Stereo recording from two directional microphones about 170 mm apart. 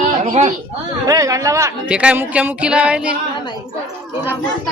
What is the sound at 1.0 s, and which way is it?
Speech, 20° right (ahead or behind).